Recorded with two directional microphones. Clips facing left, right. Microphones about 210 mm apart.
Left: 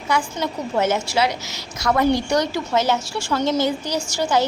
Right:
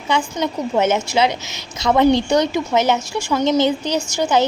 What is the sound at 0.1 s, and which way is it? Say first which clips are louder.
A woman's voice: right 3 dB; 20° right (ahead or behind).